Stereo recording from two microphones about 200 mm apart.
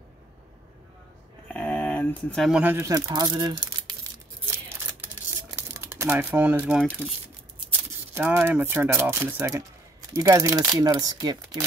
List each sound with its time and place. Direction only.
1.5 s crumpling: 5° left (ahead or behind); by 4.6 s 20° right (ahead or behind)
5.6 s speech: 10° right (ahead or behind)
8.1 s speech: 10° right (ahead or behind)